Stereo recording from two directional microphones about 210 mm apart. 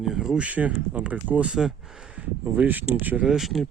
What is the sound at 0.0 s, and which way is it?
Speech, centre (ahead or behind).